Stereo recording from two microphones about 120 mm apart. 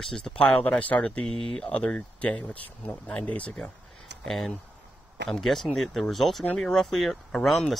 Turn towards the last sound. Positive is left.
turn(degrees=0)  # may be behind; listen again after turning